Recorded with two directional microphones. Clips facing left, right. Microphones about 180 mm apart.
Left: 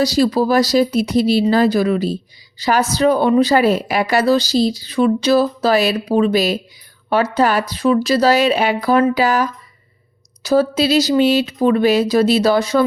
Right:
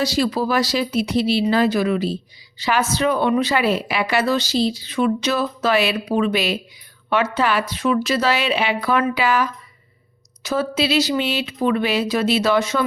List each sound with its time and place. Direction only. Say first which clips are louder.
0.0 s a woman's voice: left 5 dB; 40° left (ahead or behind)